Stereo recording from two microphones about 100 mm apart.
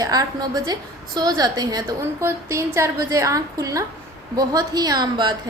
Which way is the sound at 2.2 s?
25° right (ahead or behind).